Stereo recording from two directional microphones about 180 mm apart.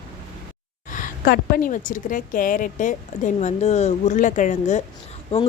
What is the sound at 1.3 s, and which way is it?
A woman's voice, 55° left (ahead or behind).